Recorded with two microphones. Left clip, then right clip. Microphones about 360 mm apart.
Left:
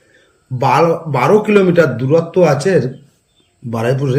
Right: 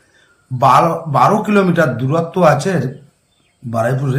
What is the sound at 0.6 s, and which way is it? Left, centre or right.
A man's voice, centre.